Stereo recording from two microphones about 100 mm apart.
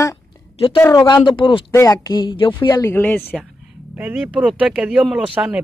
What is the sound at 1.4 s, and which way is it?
Speech, 55° left (ahead or behind).